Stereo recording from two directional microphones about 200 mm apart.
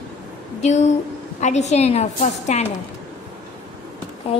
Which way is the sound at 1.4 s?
35° left (ahead or behind).